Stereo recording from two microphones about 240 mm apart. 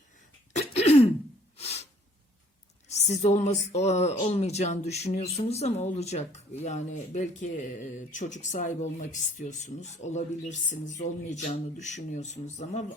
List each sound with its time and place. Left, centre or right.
0.5 s cough: left
1.5 s snort: left
2.9 s speech: left
12.1 s speech: left